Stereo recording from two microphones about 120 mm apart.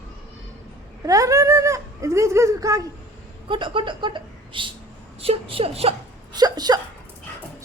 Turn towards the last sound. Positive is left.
turn(degrees=-35)  # may be behind; listen again after turning